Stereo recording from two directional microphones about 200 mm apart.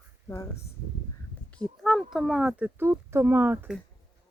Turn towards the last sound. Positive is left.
turn(degrees=-10)  # may be behind; listen again after turning